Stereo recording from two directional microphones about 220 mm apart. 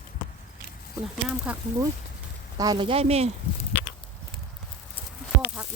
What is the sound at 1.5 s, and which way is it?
Speech, 5° right (ahead or behind).